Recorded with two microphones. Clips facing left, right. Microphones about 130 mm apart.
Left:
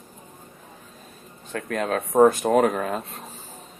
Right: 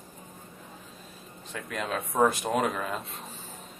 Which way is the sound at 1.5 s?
50° left (ahead or behind).